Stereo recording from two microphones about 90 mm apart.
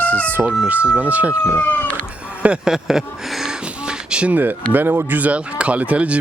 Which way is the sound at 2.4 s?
10° right (ahead or behind).